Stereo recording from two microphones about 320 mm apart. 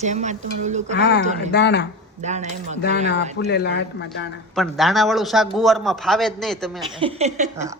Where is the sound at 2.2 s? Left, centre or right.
Right.